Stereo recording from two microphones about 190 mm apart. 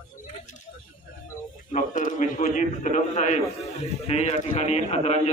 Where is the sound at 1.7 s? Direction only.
40° left (ahead or behind).